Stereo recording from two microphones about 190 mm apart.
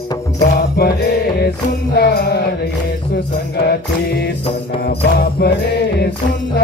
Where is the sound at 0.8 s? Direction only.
60° left (ahead or behind).